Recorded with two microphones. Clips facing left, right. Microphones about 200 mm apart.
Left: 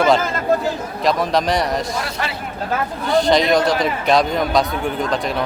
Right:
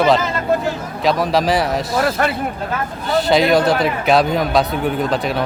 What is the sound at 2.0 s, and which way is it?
Speech, 55° right (ahead or behind).